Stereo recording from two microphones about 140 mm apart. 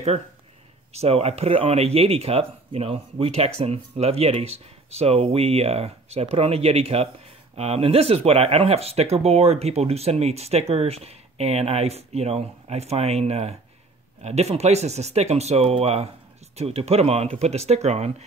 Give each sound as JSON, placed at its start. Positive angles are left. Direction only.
{"t": 0.9, "sound": "speech", "side_deg": -50}